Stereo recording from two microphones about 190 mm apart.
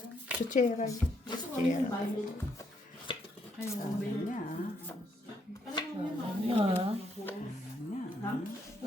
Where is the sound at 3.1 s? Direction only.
25° left (ahead or behind).